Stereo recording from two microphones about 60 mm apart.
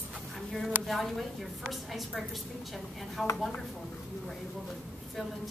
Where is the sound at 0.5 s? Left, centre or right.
Centre.